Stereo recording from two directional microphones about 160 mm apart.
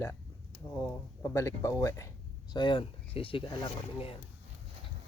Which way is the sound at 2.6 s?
30° left (ahead or behind).